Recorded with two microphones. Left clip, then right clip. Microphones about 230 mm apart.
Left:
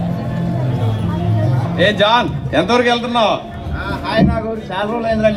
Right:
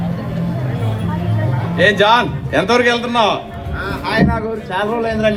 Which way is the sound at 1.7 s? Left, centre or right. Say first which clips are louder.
Right 1 dB; right.